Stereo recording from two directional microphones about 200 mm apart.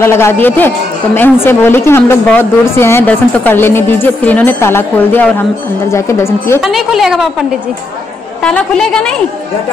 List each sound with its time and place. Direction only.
0.0 s speech: 10° left (ahead or behind)
6.6 s a woman's voice: centre (ahead or behind)
8.5 s a woman's voice: 5° left (ahead or behind)